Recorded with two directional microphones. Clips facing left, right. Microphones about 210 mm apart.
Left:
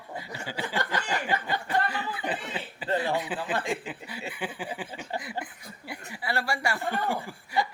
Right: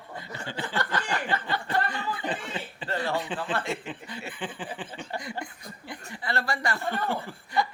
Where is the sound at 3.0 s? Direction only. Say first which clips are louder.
Right 3 dB; 10° left (ahead or behind).